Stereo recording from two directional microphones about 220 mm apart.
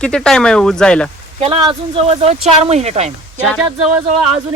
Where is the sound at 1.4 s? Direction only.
25° right (ahead or behind).